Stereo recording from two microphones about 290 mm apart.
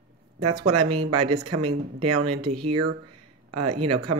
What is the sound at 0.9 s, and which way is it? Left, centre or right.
Speech, right.